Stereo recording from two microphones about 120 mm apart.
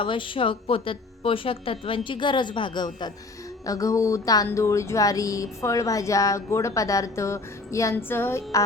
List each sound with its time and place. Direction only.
0.0 s a woman's voice: 45° left (ahead or behind); by 8.6 s 20° left (ahead or behind)